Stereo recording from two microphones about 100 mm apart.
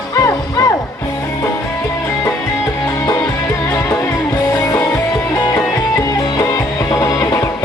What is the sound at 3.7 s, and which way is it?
Music, 30° left (ahead or behind).